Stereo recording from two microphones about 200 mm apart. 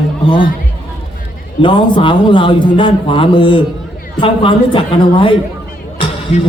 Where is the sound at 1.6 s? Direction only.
25° left (ahead or behind).